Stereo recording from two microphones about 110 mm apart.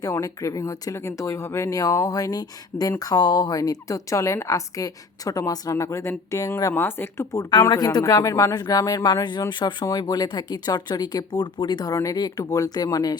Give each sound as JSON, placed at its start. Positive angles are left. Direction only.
{"t": 0.0, "sound": "a woman's voice", "side_deg": 30}
{"t": 7.6, "sound": "a woman's voice", "side_deg": 35}